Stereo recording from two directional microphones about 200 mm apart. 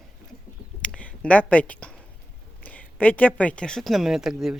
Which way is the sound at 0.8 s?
5° left (ahead or behind).